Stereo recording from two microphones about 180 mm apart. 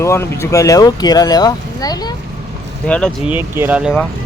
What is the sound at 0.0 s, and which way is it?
Speech, 15° left (ahead or behind).